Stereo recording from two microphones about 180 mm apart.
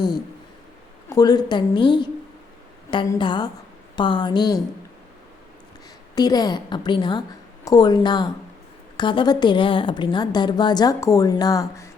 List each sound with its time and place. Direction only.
1.1 s a woman's voice: 20° left (ahead or behind)
6.1 s a woman's voice: 20° left (ahead or behind)